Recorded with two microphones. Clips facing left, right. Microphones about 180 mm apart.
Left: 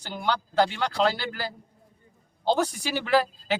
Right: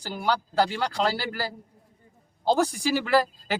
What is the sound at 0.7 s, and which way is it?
Speech, 40° right (ahead or behind).